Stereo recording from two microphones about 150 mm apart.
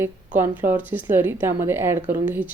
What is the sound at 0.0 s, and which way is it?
Speech, 15° right (ahead or behind).